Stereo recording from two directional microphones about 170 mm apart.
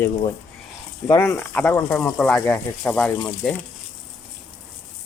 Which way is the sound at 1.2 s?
10° left (ahead or behind).